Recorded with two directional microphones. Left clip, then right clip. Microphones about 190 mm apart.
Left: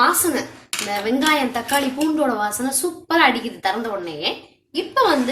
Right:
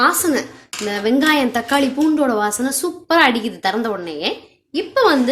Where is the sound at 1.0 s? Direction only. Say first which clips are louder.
Right 4 dB; 50° right (ahead or behind).